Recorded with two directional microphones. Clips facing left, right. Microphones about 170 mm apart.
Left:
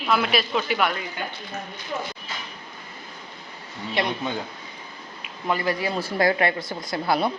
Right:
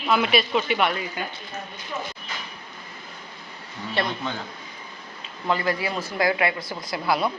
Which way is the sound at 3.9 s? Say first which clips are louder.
Left 1 dB; 15° left (ahead or behind).